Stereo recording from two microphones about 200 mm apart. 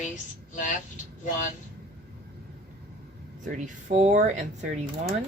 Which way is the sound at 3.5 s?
40° right (ahead or behind).